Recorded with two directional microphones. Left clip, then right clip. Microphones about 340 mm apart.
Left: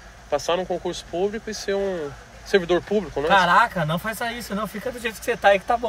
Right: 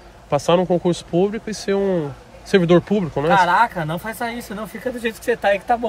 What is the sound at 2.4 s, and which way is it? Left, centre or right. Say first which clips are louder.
Speech: right 5 dB; centre.